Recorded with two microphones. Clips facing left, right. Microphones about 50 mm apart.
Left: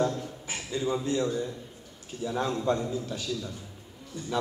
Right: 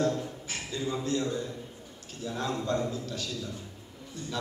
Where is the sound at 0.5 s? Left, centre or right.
Centre.